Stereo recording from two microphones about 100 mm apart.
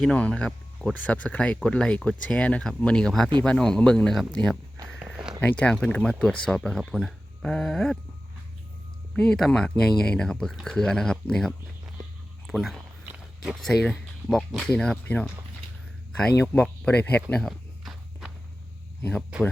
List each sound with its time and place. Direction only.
0.0 s speech: 10° left (ahead or behind)
4.9 s a sound: 5° left (ahead or behind)
5.4 s speech: 15° left (ahead or behind)
9.1 s speech: 5° left (ahead or behind)
15.0 s speech: 15° left (ahead or behind)
16.4 s speech: 15° left (ahead or behind)
17.4 s walk: centre (ahead or behind)
19.3 s speech: 10° right (ahead or behind)